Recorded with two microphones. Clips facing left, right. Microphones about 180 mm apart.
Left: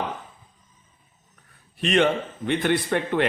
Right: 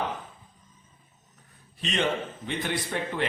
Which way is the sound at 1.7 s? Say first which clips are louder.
Left 7 dB; 60° left (ahead or behind).